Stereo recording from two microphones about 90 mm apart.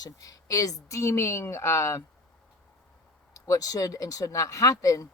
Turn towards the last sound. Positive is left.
turn(degrees=40)  # may be behind; listen again after turning